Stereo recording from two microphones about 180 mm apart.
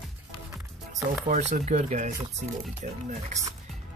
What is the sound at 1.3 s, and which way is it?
Speech, 40° right (ahead or behind).